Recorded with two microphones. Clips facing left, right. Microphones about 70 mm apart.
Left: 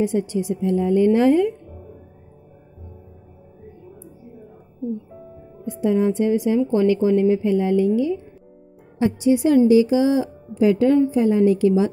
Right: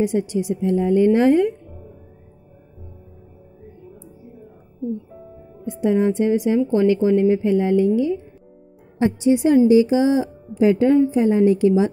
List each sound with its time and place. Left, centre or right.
0.0 s a woman's voice: centre
5.7 s a woman's voice: right